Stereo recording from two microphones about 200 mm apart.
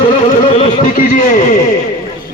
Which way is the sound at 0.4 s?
30° left (ahead or behind).